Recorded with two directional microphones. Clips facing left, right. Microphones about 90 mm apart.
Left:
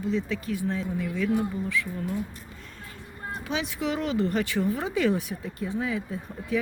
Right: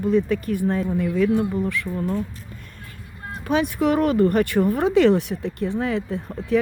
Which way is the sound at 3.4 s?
50° right (ahead or behind).